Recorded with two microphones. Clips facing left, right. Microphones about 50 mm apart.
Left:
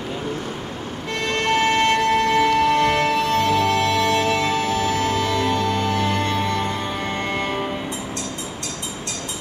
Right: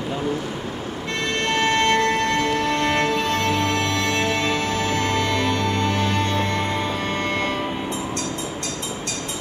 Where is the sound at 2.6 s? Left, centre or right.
Left.